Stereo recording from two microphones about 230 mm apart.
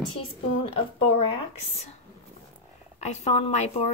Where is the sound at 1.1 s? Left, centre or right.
Left.